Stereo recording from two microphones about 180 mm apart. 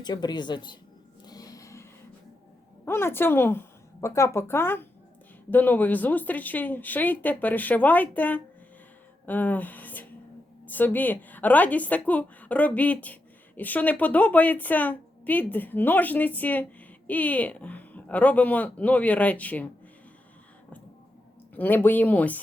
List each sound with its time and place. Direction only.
0.0 s speech: 25° left (ahead or behind)
1.2 s a sound: 20° left (ahead or behind)
2.8 s a woman's voice: 10° left (ahead or behind)
21.5 s a woman's voice: 10° left (ahead or behind)